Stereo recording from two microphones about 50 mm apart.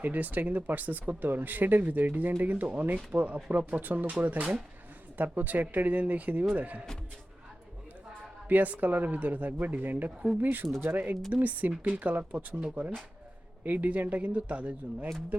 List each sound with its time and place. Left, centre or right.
0.0 s speech: right
8.4 s speech: right